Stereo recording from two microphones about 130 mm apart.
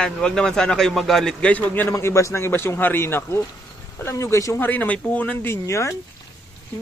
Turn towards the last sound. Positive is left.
turn(degrees=20)  # may be behind; listen again after turning